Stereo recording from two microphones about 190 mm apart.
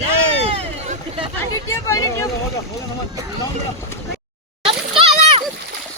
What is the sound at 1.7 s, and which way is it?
Speech, 15° left (ahead or behind).